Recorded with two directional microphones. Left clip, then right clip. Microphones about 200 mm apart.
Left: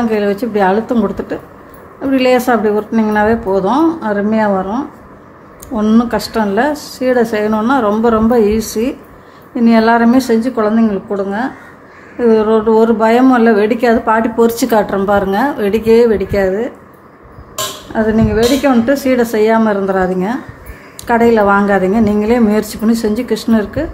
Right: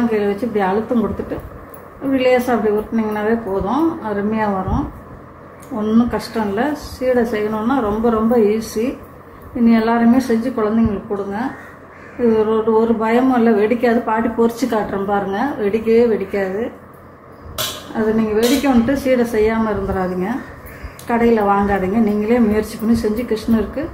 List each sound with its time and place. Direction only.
0.1 s a woman's voice: 60° left (ahead or behind)
2.1 s a woman's voice: 60° left (ahead or behind)
5.8 s a woman's voice: 60° left (ahead or behind)
12.3 s a woman's voice: 55° left (ahead or behind)
18.1 s a woman's voice: 55° left (ahead or behind)